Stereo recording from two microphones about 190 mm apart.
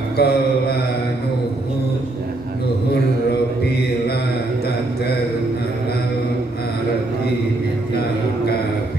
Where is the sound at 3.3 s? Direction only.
55° left (ahead or behind).